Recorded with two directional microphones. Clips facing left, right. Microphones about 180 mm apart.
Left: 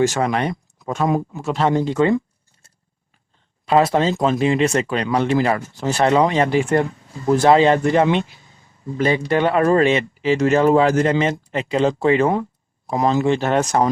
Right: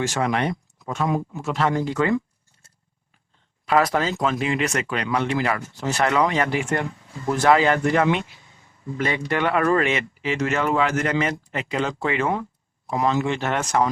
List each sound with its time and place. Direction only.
0.0 s speech: 40° left (ahead or behind); by 2.1 s 25° left (ahead or behind)
3.7 s speech: 25° left (ahead or behind)